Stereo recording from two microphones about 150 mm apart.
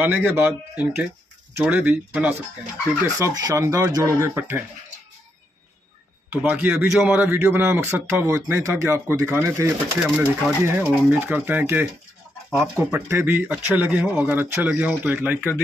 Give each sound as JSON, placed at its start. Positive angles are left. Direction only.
{"t": 0.0, "sound": "a man's voice", "side_deg": -10}
{"t": 3.2, "sound": "speech", "side_deg": -20}
{"t": 6.3, "sound": "a man's voice", "side_deg": -10}